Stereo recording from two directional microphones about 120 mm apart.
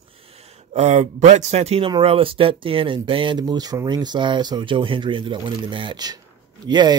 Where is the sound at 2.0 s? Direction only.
50° right (ahead or behind).